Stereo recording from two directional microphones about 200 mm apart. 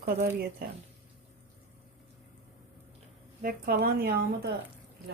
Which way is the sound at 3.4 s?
45° right (ahead or behind).